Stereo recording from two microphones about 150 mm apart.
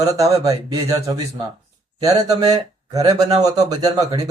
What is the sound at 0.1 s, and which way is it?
Speech, 20° right (ahead or behind).